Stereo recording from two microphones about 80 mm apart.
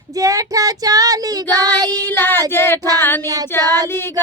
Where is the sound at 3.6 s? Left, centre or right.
Right.